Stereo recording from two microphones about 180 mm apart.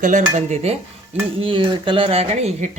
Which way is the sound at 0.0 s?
45° right (ahead or behind).